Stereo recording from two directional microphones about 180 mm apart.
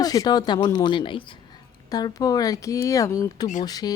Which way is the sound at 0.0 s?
20° left (ahead or behind).